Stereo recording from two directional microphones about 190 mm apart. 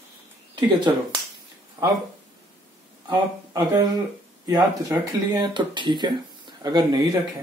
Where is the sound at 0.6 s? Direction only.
25° right (ahead or behind).